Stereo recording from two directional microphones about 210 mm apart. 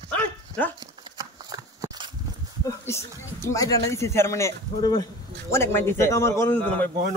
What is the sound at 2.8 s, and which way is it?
A man's voice, 15° left (ahead or behind).